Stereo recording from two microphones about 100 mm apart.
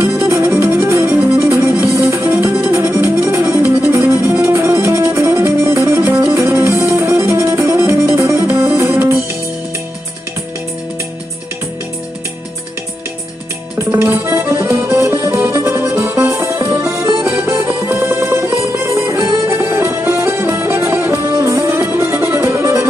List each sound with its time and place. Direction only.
0.0 s music: 30° right (ahead or behind)
13.7 s music: 25° right (ahead or behind)